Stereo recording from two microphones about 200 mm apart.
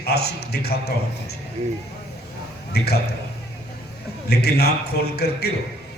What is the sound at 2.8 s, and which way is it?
Speech, 55° left (ahead or behind).